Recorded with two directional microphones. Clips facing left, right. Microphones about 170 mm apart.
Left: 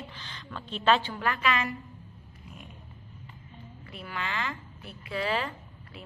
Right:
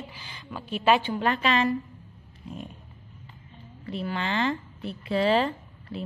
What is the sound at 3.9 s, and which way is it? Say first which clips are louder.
A woman's voice: right 7 dB; 30° right (ahead or behind).